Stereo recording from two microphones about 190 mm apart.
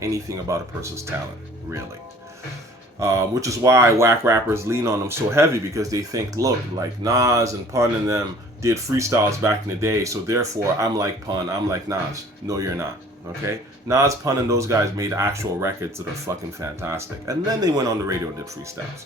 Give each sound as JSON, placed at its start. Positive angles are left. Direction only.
{"t": 0.0, "sound": "speech", "side_deg": -15}
{"t": 3.0, "sound": "speech", "side_deg": -15}